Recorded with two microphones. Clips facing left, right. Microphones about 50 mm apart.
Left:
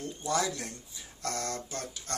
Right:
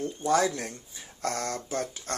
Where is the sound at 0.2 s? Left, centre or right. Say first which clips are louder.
Right 6 dB; right.